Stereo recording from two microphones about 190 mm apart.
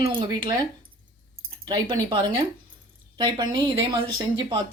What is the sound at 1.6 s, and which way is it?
Speech, 25° right (ahead or behind).